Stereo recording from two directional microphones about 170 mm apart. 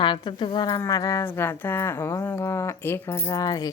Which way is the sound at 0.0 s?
30° left (ahead or behind).